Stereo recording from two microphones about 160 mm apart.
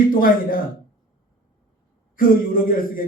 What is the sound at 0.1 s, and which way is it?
Speech, 60° left (ahead or behind).